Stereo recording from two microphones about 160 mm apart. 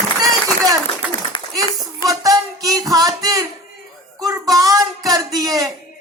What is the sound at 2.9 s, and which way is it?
Speech, 25° right (ahead or behind).